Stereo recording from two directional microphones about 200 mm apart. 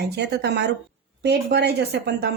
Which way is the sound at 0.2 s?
55° right (ahead or behind).